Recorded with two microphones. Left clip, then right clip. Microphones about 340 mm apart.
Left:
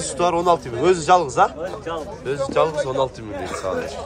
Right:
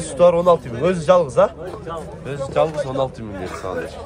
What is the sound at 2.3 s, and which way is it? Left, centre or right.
Speech, centre.